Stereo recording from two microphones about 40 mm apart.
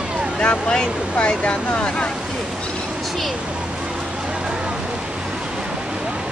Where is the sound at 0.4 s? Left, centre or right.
Left.